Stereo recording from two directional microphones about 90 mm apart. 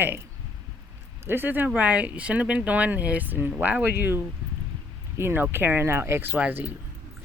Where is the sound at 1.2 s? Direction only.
25° right (ahead or behind).